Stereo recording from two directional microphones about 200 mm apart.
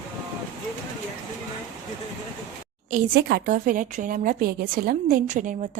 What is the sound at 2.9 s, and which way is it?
A woman's voice, 50° right (ahead or behind).